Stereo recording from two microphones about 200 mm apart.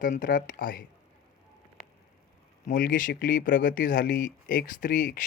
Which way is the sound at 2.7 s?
45° left (ahead or behind).